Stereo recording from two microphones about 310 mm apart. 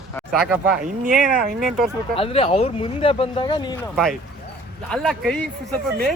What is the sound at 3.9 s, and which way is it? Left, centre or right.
Speech, centre.